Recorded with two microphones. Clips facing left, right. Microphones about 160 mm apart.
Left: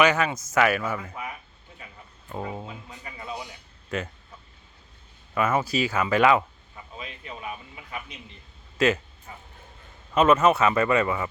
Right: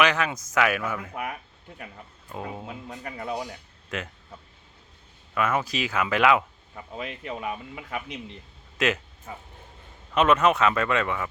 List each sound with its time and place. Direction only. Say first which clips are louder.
0.0 s speech: left 2 dB; 5° left (ahead or behind)
2.3 s speech: left 2 dB; centre (ahead or behind)
2.9 s speech: right 6 dB; 55° right (ahead or behind)
3.8 s speech: left 3 dB; centre (ahead or behind)
5.3 s speech: left 2 dB; centre (ahead or behind)
6.7 s speech: right 5 dB; 65° right (ahead or behind)
10.2 s speech: left 2 dB; 5° left (ahead or behind)